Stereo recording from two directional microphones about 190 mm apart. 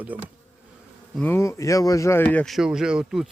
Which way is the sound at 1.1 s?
10° left (ahead or behind).